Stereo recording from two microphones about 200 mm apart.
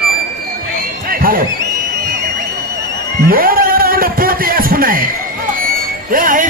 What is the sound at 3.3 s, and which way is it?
Music, 45° right (ahead or behind).